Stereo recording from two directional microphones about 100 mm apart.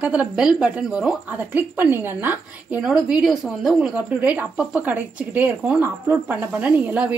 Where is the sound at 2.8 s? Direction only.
5° right (ahead or behind).